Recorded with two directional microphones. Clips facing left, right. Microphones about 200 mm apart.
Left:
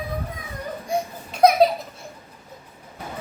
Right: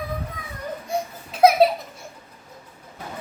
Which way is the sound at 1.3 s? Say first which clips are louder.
Right 1 dB; 5° right (ahead or behind).